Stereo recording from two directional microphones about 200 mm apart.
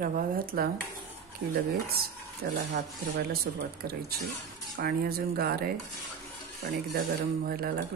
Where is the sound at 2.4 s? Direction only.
55° right (ahead or behind).